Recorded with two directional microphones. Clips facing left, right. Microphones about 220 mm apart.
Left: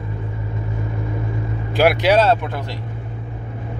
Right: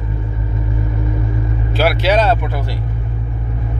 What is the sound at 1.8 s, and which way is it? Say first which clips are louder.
Speech: left 1 dB; 15° left (ahead or behind).